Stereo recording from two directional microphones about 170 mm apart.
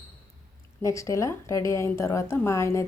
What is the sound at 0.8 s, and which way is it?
A woman's voice, 20° left (ahead or behind).